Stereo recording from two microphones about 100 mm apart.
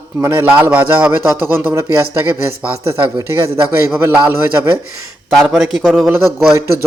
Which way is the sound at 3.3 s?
25° right (ahead or behind).